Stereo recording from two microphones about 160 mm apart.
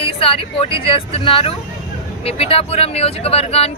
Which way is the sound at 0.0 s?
35° left (ahead or behind).